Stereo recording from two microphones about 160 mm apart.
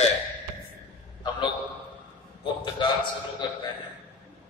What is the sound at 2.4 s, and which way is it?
Speech, 30° left (ahead or behind).